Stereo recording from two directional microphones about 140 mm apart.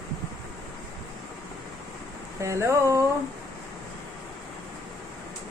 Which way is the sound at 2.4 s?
20° right (ahead or behind).